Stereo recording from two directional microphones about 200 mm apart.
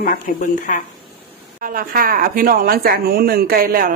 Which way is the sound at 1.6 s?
45° right (ahead or behind).